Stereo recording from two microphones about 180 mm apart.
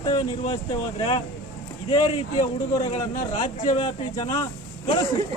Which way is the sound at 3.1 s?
45° left (ahead or behind).